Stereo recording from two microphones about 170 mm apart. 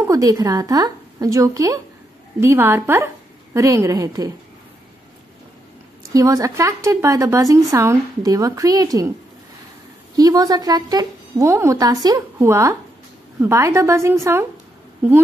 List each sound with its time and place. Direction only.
0.0 s a woman's voice: 20° right (ahead or behind)
6.1 s speech: 20° right (ahead or behind)
10.1 s a woman's voice: 20° right (ahead or behind)